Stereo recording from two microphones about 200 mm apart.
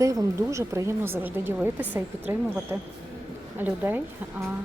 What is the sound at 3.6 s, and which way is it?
Speech, 10° right (ahead or behind).